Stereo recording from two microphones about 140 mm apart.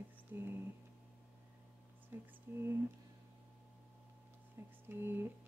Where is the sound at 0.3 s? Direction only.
15° right (ahead or behind).